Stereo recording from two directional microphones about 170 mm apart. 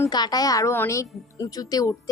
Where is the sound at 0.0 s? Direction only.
25° left (ahead or behind).